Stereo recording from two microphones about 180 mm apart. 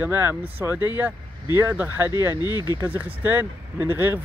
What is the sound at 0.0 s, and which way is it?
Speech, 10° right (ahead or behind).